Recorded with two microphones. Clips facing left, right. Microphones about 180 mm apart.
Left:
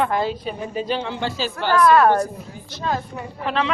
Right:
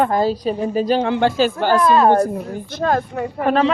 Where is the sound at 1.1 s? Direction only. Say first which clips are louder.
Right 9 dB; 55° right (ahead or behind).